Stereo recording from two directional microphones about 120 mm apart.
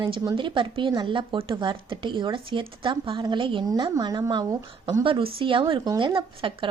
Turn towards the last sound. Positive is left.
turn(degrees=-45)  # may be behind; listen again after turning